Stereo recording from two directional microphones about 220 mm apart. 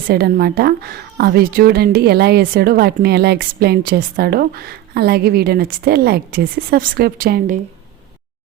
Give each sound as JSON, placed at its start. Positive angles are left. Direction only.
{"t": 0.1, "sound": "a woman's voice", "side_deg": -45}